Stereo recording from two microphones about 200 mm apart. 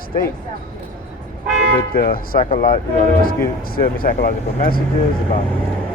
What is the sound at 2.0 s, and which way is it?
Speech, 45° left (ahead or behind).